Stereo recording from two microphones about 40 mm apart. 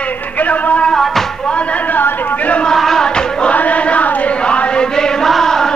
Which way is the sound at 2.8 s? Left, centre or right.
Centre.